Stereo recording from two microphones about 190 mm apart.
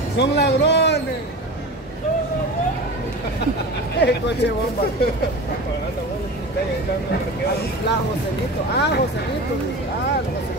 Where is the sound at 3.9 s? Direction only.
60° left (ahead or behind).